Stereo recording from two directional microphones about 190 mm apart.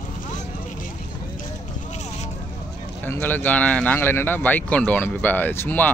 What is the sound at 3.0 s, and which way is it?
Speech, 10° left (ahead or behind).